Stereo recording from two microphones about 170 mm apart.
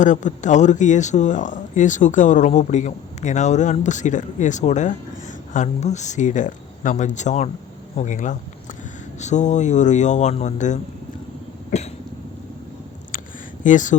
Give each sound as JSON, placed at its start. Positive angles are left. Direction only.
{"t": 0.0, "sound": "speech", "side_deg": 45}
{"t": 11.7, "sound": "cough", "side_deg": 40}
{"t": 13.7, "sound": "speech", "side_deg": 50}